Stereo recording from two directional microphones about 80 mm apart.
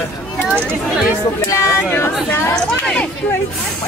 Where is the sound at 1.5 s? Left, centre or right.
Left.